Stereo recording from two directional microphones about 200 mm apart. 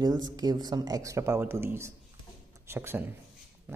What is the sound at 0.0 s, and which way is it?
Speech, 20° right (ahead or behind).